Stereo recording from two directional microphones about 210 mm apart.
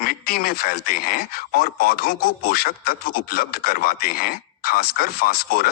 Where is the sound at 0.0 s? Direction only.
45° left (ahead or behind).